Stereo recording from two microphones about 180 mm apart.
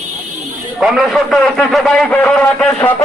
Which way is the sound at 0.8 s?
Centre (ahead or behind).